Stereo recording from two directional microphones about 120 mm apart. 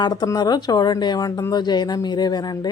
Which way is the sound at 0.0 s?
35° left (ahead or behind).